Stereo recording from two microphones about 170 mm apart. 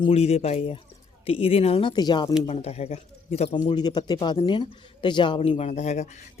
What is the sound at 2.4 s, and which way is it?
Speech, 35° left (ahead or behind).